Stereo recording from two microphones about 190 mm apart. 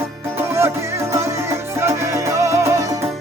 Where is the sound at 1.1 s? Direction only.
15° right (ahead or behind).